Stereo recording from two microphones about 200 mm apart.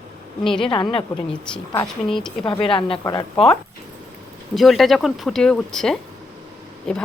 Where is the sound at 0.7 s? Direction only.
25° left (ahead or behind).